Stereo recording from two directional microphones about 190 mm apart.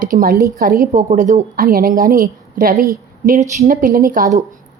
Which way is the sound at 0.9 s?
35° right (ahead or behind).